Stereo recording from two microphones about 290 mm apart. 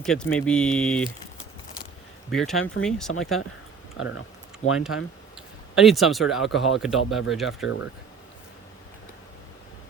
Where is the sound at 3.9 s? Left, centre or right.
Left.